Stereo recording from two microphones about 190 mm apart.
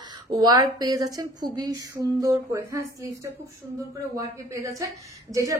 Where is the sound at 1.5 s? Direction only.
20° right (ahead or behind).